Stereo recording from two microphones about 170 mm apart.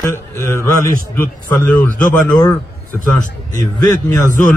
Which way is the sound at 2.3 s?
25° left (ahead or behind).